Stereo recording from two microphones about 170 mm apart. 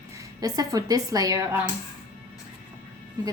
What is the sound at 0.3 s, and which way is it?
A woman's voice, 20° right (ahead or behind).